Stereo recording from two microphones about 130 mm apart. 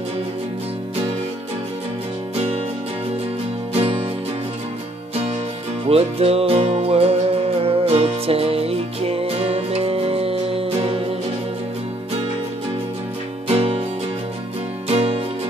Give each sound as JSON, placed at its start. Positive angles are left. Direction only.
{"t": 2.3, "sound": "music", "side_deg": -50}
{"t": 3.7, "sound": "music", "side_deg": -45}
{"t": 5.9, "sound": "music", "side_deg": -50}
{"t": 13.5, "sound": "music", "side_deg": -50}
{"t": 14.9, "sound": "music", "side_deg": -50}